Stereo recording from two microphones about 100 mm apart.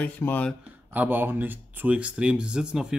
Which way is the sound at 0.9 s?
20° right (ahead or behind).